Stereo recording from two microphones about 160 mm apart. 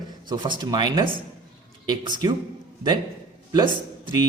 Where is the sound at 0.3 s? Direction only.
30° right (ahead or behind).